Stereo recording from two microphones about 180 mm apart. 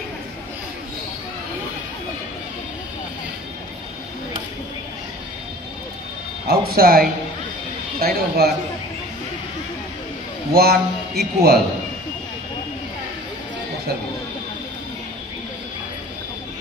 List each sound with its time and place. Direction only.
6.4 s speech: 60° right (ahead or behind)
10.5 s speech: 60° right (ahead or behind)